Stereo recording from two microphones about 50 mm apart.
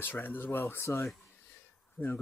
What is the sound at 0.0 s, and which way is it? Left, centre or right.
Speech, left.